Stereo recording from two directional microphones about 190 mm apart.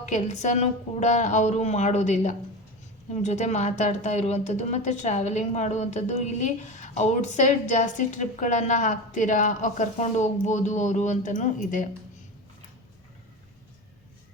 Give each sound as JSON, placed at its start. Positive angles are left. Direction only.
{"t": 0.0, "sound": "a woman's voice", "side_deg": 40}